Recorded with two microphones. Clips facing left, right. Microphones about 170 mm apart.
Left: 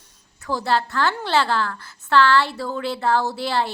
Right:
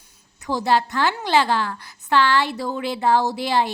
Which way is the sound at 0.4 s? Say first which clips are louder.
Right 2 dB; 20° right (ahead or behind).